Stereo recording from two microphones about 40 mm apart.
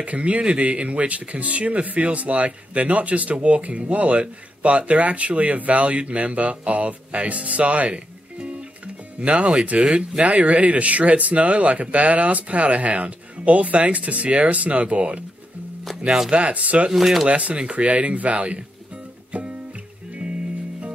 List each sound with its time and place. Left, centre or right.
0.0 s speech: right
8.4 s music: right
9.7 s speech: right
10.2 s speech: right
16.3 s speech: right
16.9 s speech: centre
17.3 s speech: right